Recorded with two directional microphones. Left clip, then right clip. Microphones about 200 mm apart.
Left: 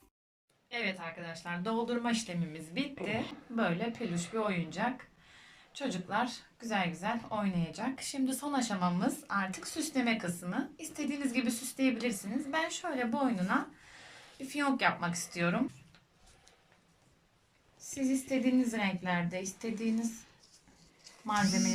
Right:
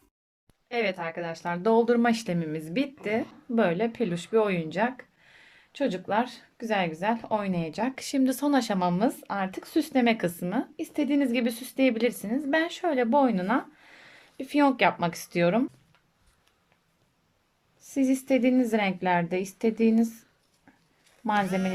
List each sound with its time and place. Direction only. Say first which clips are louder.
0.7 s a woman's voice: right 8 dB; 55° right (ahead or behind)
17.9 s a woman's voice: right 8 dB; 50° right (ahead or behind)
21.2 s a woman's voice: right 6 dB; 50° right (ahead or behind)